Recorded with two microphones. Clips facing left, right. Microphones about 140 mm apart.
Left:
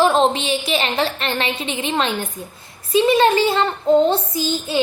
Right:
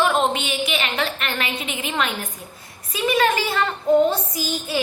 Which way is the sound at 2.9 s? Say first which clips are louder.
Left 6 dB; 30° left (ahead or behind).